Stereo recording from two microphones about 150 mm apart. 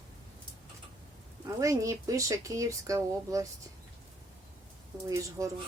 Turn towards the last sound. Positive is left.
turn(degrees=-20)  # may be behind; listen again after turning